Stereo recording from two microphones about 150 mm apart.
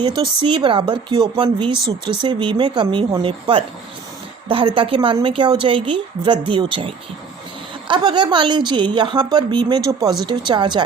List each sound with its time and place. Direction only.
0.0 s speech: 30° right (ahead or behind)